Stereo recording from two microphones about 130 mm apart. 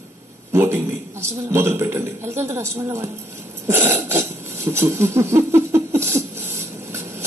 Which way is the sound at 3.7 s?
15° right (ahead or behind).